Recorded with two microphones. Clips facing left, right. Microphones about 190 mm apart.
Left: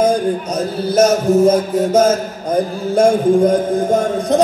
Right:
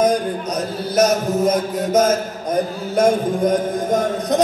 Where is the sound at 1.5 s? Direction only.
30° left (ahead or behind).